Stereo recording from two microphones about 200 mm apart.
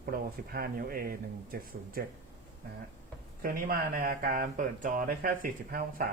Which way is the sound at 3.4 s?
45° right (ahead or behind).